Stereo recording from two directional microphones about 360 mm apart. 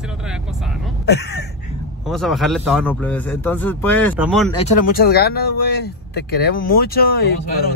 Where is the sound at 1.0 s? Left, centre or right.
Left.